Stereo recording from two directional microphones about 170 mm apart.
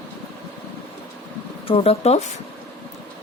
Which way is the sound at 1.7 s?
35° left (ahead or behind).